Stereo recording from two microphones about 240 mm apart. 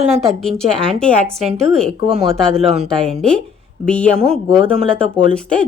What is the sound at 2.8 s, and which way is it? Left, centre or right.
Speech, centre.